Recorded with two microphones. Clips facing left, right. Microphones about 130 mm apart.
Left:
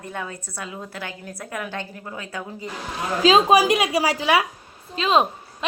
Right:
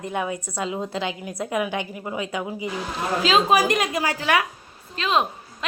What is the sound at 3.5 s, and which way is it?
A woman's voice, 10° left (ahead or behind).